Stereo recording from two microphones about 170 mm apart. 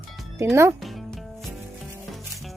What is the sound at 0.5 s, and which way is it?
Speech, 15° right (ahead or behind).